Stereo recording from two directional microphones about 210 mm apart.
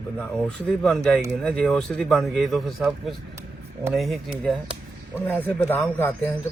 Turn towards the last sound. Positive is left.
turn(degrees=10)  # may be behind; listen again after turning